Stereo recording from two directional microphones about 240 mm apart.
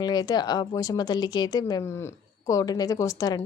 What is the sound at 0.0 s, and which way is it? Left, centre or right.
A woman's voice, centre.